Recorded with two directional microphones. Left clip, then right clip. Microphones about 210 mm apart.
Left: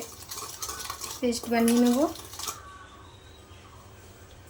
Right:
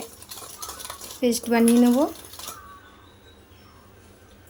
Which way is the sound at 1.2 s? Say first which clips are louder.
Right 5 dB; 50° right (ahead or behind).